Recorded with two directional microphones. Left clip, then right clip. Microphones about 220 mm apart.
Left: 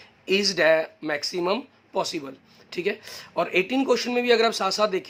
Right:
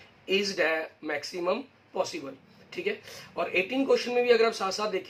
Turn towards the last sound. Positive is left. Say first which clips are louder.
# left 6 dB
turn(degrees=45)  # may be behind; listen again after turning